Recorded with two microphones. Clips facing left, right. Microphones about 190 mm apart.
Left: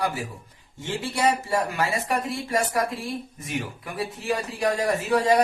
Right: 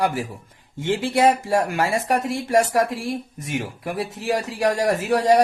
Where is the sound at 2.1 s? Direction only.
80° right.